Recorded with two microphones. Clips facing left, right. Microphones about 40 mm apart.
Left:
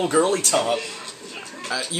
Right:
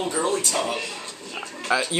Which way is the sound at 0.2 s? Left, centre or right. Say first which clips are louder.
Left 7 dB; left.